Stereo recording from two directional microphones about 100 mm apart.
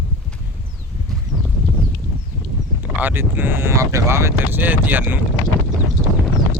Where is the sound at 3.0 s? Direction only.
20° right (ahead or behind).